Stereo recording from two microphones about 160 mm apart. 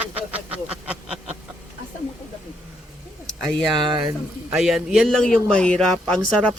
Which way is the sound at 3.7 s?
30° right (ahead or behind).